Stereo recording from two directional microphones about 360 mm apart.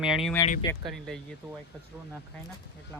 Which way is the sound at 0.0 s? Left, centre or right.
Centre.